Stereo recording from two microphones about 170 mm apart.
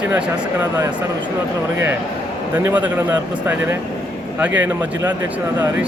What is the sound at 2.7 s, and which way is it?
Speech, 10° right (ahead or behind).